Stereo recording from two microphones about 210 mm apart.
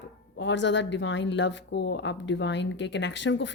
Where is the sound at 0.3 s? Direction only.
60° left (ahead or behind).